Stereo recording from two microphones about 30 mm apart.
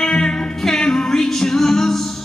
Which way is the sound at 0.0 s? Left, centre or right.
Left.